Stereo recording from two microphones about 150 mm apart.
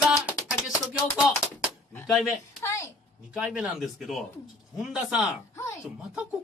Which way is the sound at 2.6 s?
20° left (ahead or behind).